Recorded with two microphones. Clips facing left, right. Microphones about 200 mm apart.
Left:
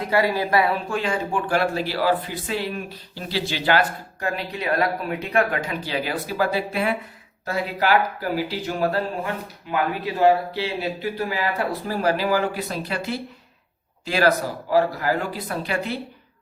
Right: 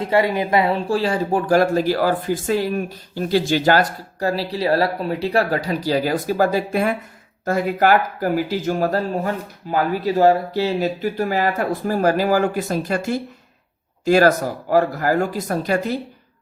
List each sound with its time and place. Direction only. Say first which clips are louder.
0.0 s speech: right 3 dB; 25° right (ahead or behind)
0.9 s speech: right 5 dB; 35° right (ahead or behind)